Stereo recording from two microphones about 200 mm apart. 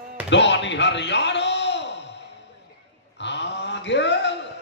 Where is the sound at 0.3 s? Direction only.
60° left (ahead or behind).